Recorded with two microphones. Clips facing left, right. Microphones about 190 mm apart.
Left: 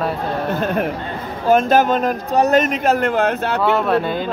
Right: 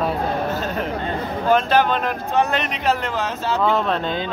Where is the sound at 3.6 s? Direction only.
10° left (ahead or behind).